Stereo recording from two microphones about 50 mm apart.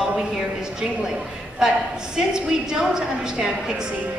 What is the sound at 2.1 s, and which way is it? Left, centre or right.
A woman's voice, centre.